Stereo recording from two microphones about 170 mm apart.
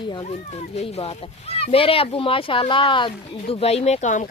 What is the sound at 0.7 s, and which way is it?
Speech, 35° left (ahead or behind).